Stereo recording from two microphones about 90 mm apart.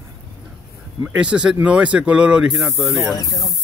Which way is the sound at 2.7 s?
30° right (ahead or behind).